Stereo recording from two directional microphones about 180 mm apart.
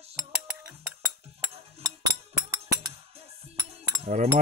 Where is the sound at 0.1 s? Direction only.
15° right (ahead or behind).